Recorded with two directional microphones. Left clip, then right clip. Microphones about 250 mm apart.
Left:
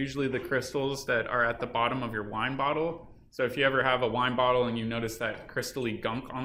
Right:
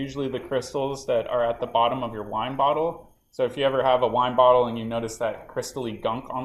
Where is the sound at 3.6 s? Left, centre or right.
Centre.